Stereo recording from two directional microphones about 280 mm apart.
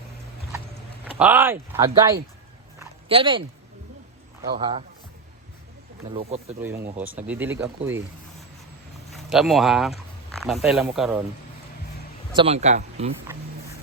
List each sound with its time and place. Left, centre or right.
1.2 s speech: centre
4.5 s speech: centre
6.1 s speech: right
6.8 s speech: centre
9.1 s speech: centre
12.3 s speech: centre